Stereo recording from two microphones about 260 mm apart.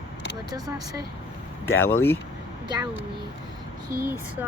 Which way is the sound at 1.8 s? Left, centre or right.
Centre.